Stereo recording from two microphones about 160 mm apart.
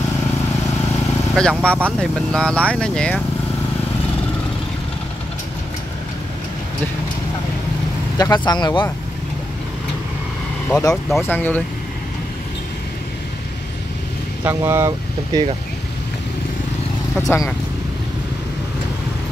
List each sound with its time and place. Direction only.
1.3 s speech: 5° left (ahead or behind)
8.2 s speech: 25° left (ahead or behind)
10.7 s speech: 25° left (ahead or behind)
11.1 s speech: 10° left (ahead or behind)
14.4 s speech: 15° right (ahead or behind)
17.2 s speech: 20° left (ahead or behind)